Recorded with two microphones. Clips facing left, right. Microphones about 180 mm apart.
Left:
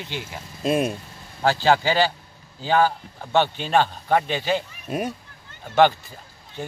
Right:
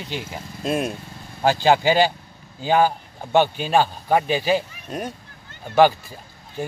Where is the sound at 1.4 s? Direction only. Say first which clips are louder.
Right 2 dB; 15° right (ahead or behind).